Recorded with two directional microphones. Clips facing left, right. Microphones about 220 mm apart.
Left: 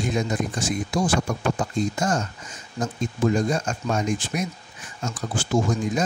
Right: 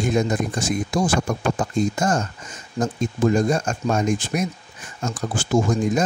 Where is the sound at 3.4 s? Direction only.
50° right (ahead or behind).